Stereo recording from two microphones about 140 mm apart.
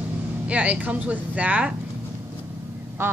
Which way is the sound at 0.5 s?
10° right (ahead or behind).